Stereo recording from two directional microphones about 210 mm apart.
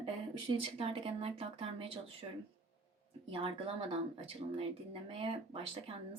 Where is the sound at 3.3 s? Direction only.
25° right (ahead or behind).